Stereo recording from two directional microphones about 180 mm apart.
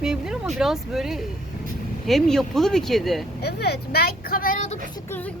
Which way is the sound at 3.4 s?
65° left (ahead or behind).